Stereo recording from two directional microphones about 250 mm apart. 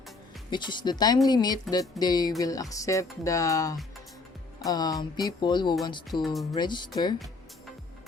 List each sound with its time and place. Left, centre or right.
0.5 s speech: centre